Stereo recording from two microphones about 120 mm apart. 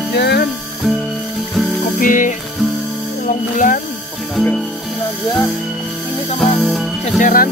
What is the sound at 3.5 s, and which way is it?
Speech, 90° left.